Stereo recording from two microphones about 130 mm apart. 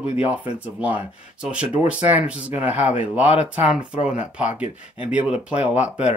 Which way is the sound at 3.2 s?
55° left (ahead or behind).